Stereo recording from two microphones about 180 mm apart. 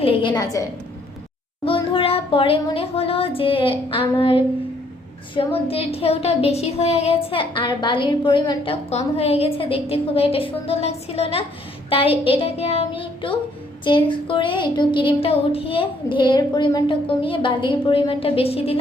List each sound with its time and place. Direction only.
0.0 s speech: 30° left (ahead or behind)
1.6 s speech: 30° left (ahead or behind)
5.6 s speech: 35° left (ahead or behind)